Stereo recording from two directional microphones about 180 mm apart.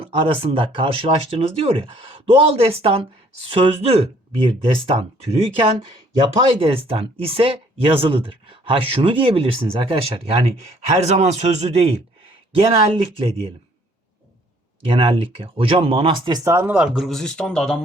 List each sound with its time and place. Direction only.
0.0 s speech: 30° right (ahead or behind)
14.8 s speech: 30° right (ahead or behind); by 17.7 s 5° left (ahead or behind)